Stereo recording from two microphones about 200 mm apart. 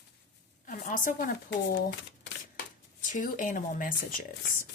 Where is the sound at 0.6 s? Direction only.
40° left (ahead or behind).